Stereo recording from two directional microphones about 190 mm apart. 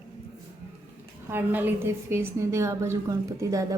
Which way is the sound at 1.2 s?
10° right (ahead or behind).